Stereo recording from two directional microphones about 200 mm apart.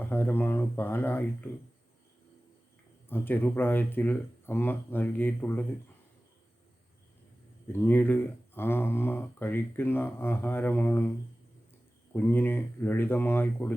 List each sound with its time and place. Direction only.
0.0 s speech: 10° left (ahead or behind)
3.1 s speech: 10° left (ahead or behind)
7.7 s speech: 10° left (ahead or behind)
12.1 s speech: 10° left (ahead or behind)